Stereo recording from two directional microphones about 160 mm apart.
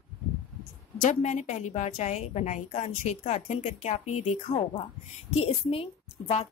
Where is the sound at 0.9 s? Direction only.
50° left (ahead or behind).